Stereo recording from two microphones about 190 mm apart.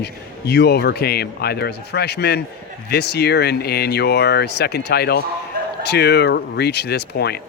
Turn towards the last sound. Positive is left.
turn(degrees=55)  # may be behind; listen again after turning